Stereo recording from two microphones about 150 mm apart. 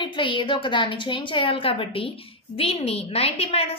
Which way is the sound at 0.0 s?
35° left (ahead or behind).